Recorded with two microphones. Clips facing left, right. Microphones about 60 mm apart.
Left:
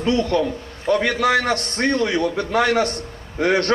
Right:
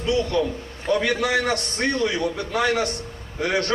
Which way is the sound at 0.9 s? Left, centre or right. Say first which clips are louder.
Left 3 dB; left.